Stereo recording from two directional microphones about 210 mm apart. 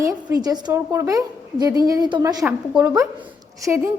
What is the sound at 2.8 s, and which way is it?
A woman's voice, 15° right (ahead or behind).